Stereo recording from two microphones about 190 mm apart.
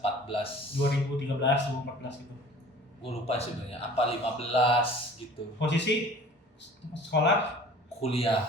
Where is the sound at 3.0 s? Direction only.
30° left (ahead or behind).